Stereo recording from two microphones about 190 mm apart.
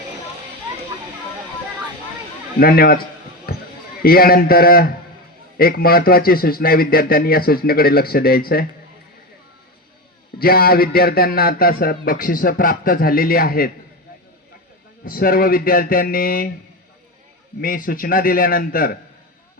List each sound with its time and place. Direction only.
2.6 s speech: 50° left (ahead or behind)
3.5 s a sound: 50° left (ahead or behind)
4.0 s speech: 50° left (ahead or behind)
10.3 s speech: 50° left (ahead or behind)
15.0 s speech: 50° left (ahead or behind)
17.6 s speech: 45° left (ahead or behind)